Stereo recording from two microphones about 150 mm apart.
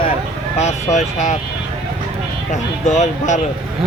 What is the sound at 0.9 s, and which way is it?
Speech, 55° left (ahead or behind).